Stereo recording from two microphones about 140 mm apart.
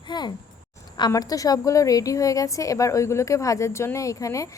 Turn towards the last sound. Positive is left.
turn(degrees=25)  # may be behind; listen again after turning